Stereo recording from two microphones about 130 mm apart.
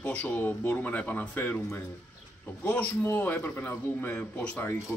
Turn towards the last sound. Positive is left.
turn(degrees=10)  # may be behind; listen again after turning